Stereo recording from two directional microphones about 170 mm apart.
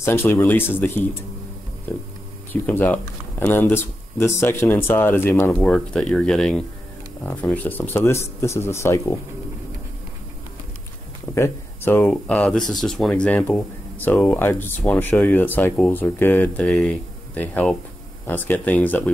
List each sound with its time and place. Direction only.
0.0 s speech: 15° left (ahead or behind)
11.3 s speech: 15° left (ahead or behind)